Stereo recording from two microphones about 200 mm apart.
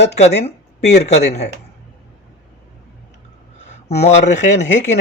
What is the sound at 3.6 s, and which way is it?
Speech, 35° left (ahead or behind).